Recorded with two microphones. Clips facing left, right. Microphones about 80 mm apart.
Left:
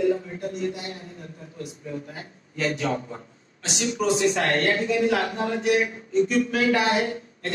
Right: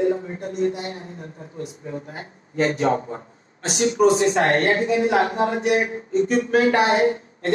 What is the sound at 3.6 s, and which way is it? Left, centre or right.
A woman's voice, right.